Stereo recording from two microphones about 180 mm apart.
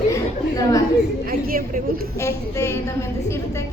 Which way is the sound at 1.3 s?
55° right (ahead or behind).